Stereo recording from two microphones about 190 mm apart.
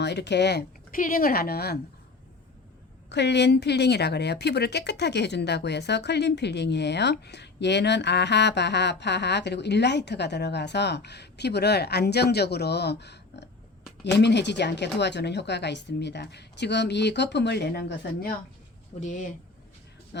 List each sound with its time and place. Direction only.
0.0 s a woman's voice: 65° left (ahead or behind)
3.1 s a woman's voice: 65° left (ahead or behind)
18.9 s speech: 40° left (ahead or behind)